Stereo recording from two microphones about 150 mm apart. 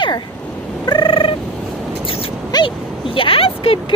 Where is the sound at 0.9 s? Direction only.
30° left (ahead or behind).